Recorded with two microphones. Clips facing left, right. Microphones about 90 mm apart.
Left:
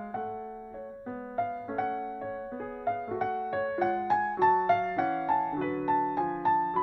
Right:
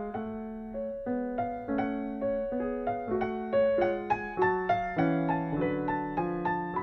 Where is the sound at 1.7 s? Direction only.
40° left (ahead or behind).